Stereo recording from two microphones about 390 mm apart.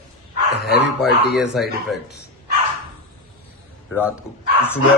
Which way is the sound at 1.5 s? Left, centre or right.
Centre.